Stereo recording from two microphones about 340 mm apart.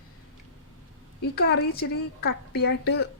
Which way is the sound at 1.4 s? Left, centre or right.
Left.